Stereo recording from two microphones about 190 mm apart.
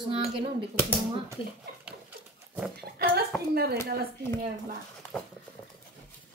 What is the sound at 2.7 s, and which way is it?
Speech, 55° right (ahead or behind).